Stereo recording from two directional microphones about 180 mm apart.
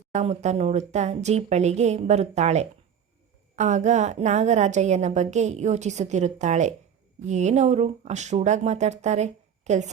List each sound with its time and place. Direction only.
0.1 s a woman's voice: 40° right (ahead or behind)